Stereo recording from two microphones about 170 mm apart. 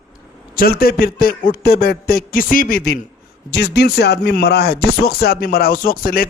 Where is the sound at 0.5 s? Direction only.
60° left (ahead or behind).